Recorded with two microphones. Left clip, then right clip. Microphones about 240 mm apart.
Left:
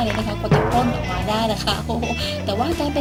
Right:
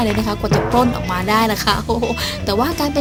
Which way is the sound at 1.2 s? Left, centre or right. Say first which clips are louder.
Right 6 dB; right.